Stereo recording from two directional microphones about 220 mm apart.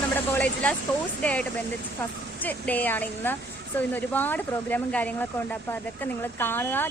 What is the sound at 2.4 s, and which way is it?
Speech, 5° left (ahead or behind).